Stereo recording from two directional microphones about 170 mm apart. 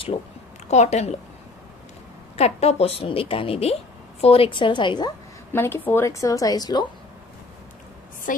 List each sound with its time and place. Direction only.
0.7 s a woman's voice: 40° left (ahead or behind)
2.3 s a woman's voice: 35° left (ahead or behind)
5.5 s a woman's voice: 15° left (ahead or behind)
8.3 s a woman's voice: 55° left (ahead or behind)